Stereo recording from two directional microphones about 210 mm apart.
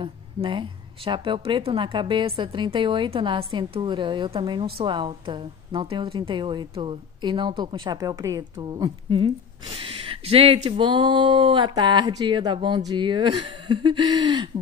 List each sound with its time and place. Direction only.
0.0 s a woman's voice: 25° right (ahead or behind)